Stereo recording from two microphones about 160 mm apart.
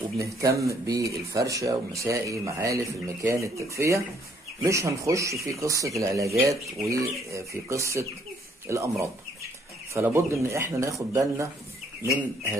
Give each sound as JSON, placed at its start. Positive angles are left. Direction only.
{"t": 0.2, "sound": "speech", "side_deg": -20}
{"t": 9.9, "sound": "speech", "side_deg": -15}